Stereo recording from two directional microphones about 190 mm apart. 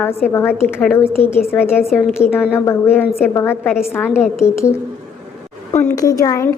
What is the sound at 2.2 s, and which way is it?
Speech, 35° left (ahead or behind).